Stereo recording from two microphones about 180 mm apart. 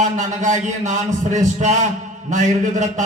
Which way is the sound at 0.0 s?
45° right (ahead or behind).